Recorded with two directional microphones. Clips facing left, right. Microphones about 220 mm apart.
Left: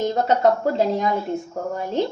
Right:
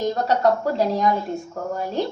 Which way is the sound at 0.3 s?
20° left (ahead or behind).